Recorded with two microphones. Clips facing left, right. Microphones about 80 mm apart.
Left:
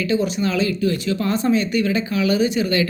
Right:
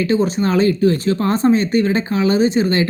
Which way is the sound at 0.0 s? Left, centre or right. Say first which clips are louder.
Right 4 dB; right.